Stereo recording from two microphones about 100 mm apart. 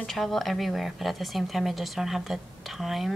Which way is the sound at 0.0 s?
Centre (ahead or behind).